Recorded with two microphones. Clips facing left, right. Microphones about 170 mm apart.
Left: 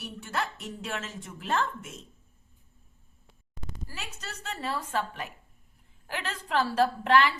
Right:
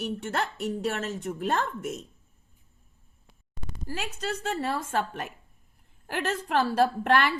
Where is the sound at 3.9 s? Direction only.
50° right (ahead or behind).